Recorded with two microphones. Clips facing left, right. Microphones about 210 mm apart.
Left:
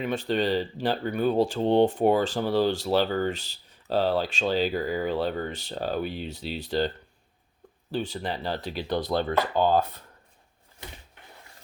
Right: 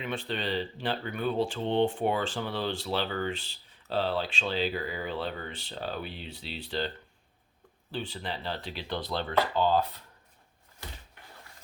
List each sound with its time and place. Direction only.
0.0 s speech: 40° left (ahead or behind)